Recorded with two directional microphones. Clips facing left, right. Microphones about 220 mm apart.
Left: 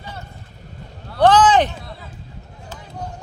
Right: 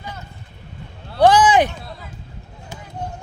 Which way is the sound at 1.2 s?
10° right (ahead or behind).